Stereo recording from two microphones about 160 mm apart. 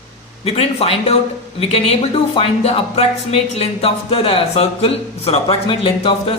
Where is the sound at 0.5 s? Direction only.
40° left (ahead or behind).